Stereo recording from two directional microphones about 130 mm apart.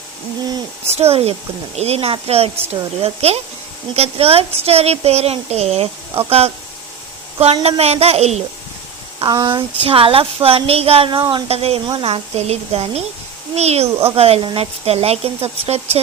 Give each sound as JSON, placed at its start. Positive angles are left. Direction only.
{"t": 0.9, "sound": "a woman's voice", "side_deg": -50}
{"t": 9.1, "sound": "a woman's voice", "side_deg": -35}